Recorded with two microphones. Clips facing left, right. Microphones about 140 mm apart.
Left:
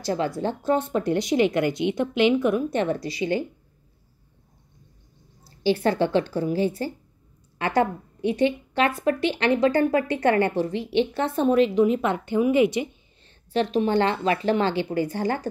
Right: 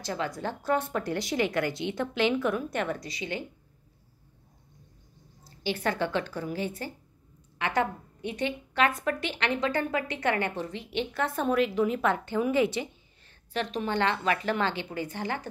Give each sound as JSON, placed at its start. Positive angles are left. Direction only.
{"t": 0.0, "sound": "speech", "side_deg": 30}
{"t": 5.4, "sound": "a woman's voice", "side_deg": 30}
{"t": 13.7, "sound": "a woman's voice", "side_deg": 35}